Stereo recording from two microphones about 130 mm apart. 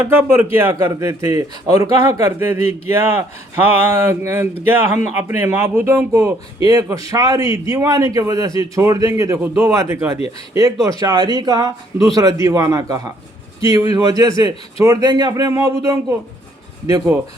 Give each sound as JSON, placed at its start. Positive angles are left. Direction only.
{"t": 0.0, "sound": "speech", "side_deg": -10}